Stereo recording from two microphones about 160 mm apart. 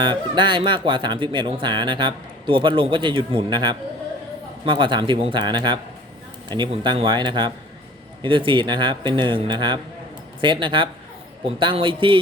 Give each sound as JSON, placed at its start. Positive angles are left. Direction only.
{"t": 0.0, "sound": "a man's voice", "side_deg": -30}